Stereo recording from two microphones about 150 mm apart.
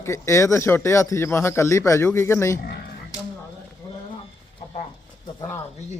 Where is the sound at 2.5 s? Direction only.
90° left.